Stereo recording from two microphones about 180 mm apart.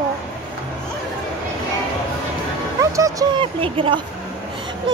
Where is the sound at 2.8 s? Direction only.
20° right (ahead or behind).